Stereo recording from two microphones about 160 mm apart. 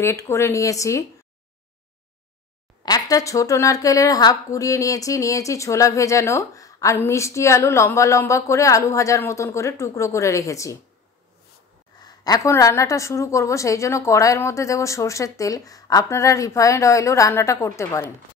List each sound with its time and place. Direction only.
0.0 s a woman's voice: 15° left (ahead or behind)
2.8 s a woman's voice: 25° left (ahead or behind)
12.0 s a woman's voice: 20° left (ahead or behind)